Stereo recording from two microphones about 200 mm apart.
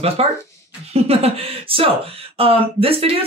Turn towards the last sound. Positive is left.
turn(degrees=-30)  # may be behind; listen again after turning